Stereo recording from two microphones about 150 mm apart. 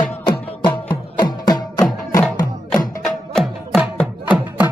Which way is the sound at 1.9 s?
5° left (ahead or behind).